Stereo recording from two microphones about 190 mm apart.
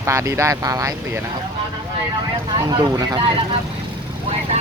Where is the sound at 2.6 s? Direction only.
20° right (ahead or behind).